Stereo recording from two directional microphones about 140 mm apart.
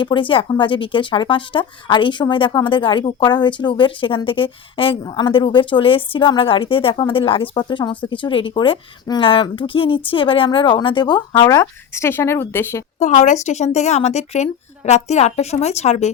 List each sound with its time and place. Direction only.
0.0 s speech: 35° left (ahead or behind); by 12.8 s 20° left (ahead or behind)
13.0 s a woman's voice: 60° left (ahead or behind)